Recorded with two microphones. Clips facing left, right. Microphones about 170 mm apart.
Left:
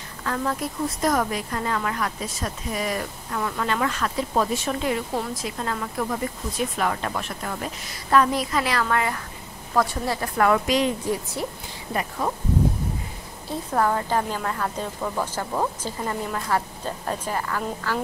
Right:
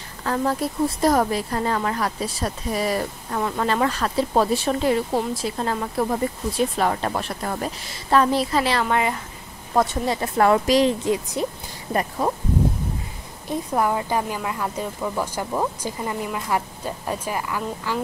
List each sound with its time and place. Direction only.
0.2 s a woman's voice: 30° right (ahead or behind)
11.1 s speech: 20° right (ahead or behind)
13.5 s a woman's voice: 15° right (ahead or behind)